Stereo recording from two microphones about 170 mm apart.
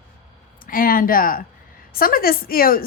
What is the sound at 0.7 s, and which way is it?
Speech, 55° left (ahead or behind).